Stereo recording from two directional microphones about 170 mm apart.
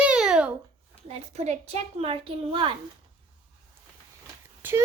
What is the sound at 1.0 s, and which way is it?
A child's voice, 40° right (ahead or behind).